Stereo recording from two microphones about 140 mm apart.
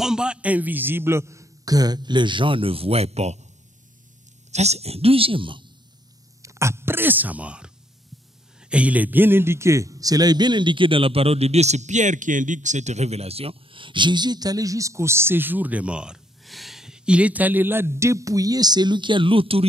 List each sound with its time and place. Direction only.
0.0 s a man's voice: 5° right (ahead or behind); by 3.4 s 50° right (ahead or behind)
4.5 s speech: 50° right (ahead or behind)
6.4 s a man's voice: 20° right (ahead or behind); by 19.6 s 40° right (ahead or behind)